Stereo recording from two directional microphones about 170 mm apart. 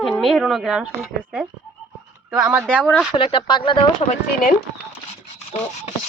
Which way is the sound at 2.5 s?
15° right (ahead or behind).